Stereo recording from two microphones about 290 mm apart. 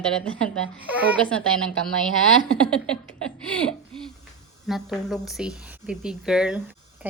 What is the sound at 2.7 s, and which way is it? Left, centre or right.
Speech, centre.